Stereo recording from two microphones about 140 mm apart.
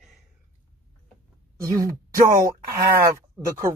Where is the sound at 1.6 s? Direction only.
20° right (ahead or behind).